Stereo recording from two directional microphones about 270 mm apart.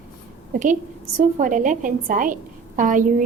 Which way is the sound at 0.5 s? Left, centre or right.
Right.